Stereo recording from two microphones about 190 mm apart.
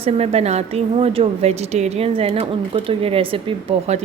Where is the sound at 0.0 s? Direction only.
30° right (ahead or behind).